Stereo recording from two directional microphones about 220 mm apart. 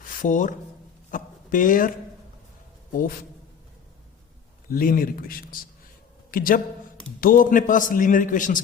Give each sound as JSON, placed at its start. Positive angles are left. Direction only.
{"t": 0.2, "sound": "a man's voice", "side_deg": 35}
{"t": 4.7, "sound": "a man's voice", "side_deg": 40}